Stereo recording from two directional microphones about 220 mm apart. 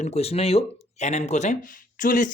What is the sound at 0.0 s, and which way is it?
Speech, 30° left (ahead or behind).